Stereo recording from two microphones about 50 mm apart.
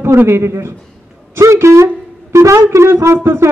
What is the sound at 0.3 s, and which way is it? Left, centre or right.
A man's voice, right.